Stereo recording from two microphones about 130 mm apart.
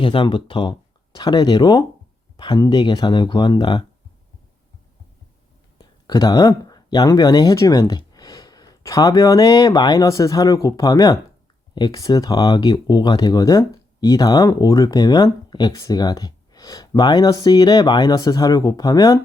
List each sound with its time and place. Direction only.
0.0 s speech: 40° left (ahead or behind)
5.7 s speech: 30° left (ahead or behind)